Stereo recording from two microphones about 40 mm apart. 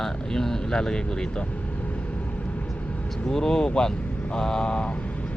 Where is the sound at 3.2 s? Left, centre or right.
Centre.